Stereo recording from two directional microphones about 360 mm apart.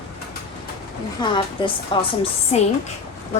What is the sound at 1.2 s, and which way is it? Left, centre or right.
A woman's voice, centre.